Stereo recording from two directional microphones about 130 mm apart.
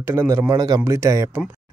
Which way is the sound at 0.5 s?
30° right (ahead or behind).